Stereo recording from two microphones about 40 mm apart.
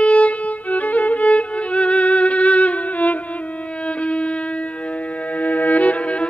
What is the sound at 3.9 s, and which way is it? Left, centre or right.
Music, left.